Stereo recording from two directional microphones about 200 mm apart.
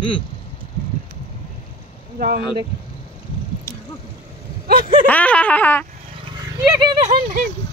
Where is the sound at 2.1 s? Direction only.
45° right (ahead or behind).